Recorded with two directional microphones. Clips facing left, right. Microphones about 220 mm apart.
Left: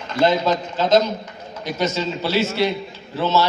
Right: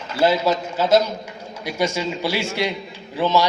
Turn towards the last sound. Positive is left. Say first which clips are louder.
# even
turn(degrees=-15)  # may be behind; listen again after turning